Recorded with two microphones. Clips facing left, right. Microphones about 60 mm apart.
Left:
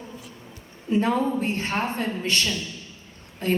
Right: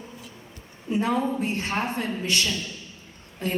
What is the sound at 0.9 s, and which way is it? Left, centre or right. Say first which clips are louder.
A woman's voice: left 2 dB; left.